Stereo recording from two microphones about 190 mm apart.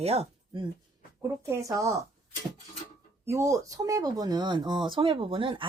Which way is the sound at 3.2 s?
15° right (ahead or behind).